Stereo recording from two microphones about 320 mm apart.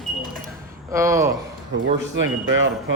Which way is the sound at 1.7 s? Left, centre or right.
Right.